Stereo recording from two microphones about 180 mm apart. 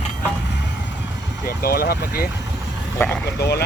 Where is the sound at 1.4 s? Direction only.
55° left (ahead or behind).